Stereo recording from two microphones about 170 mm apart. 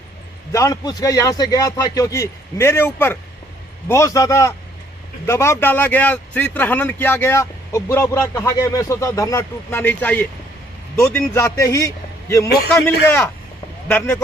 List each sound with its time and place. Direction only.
0.5 s a man's voice: 20° left (ahead or behind)
13.1 s speech: 15° left (ahead or behind)